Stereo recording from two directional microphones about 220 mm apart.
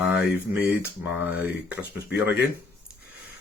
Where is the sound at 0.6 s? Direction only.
5° right (ahead or behind).